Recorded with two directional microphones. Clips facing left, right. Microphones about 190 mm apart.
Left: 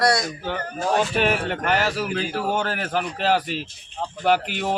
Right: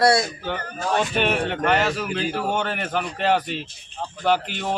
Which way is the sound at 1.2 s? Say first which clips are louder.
Even; 5° left (ahead or behind).